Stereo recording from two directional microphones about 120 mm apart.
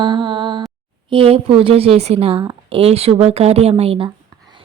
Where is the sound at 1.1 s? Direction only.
50° right (ahead or behind).